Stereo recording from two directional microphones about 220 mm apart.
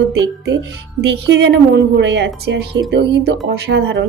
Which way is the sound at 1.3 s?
50° right (ahead or behind).